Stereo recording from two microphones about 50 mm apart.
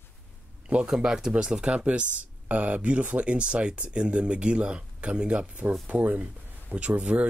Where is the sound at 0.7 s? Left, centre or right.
Centre.